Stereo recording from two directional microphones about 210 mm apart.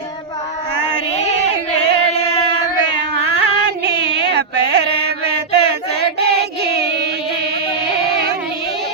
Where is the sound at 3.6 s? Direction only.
55° right (ahead or behind).